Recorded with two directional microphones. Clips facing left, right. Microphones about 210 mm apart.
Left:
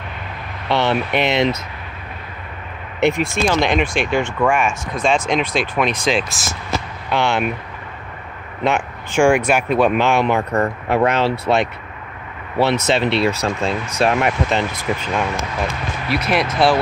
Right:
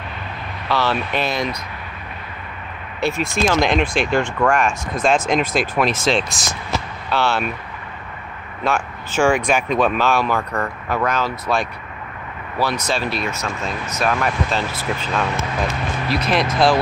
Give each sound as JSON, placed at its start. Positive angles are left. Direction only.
{"t": 0.7, "sound": "speech", "side_deg": 20}
{"t": 3.0, "sound": "speech", "side_deg": 15}
{"t": 3.4, "sound": "speech", "side_deg": 0}
{"t": 7.1, "sound": "speech", "side_deg": 15}
{"t": 8.6, "sound": "speech", "side_deg": 15}
{"t": 16.1, "sound": "speech", "side_deg": 5}